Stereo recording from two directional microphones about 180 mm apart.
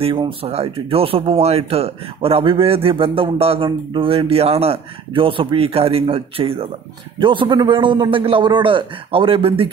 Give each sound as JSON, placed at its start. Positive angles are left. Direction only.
{"t": 0.0, "sound": "a man's voice", "side_deg": -30}